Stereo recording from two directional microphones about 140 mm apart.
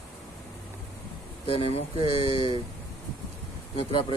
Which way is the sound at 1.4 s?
40° left (ahead or behind).